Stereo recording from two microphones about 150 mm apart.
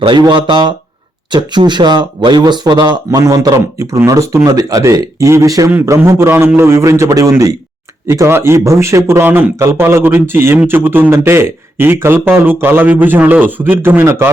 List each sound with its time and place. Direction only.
0.0 s speech: 30° right (ahead or behind); by 14.3 s 15° right (ahead or behind)